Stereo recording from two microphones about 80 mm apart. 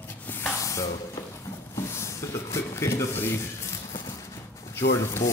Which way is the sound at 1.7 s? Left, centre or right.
Left.